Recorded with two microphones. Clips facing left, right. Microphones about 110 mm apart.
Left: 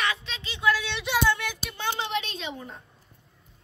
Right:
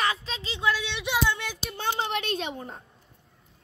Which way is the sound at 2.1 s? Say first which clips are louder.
Right 2 dB; 55° right (ahead or behind).